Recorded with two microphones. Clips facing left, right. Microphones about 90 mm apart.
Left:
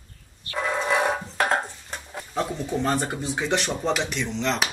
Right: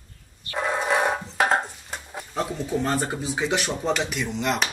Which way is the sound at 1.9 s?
10° right (ahead or behind).